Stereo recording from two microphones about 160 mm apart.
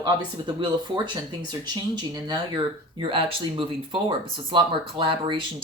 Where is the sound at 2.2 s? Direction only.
30° right (ahead or behind).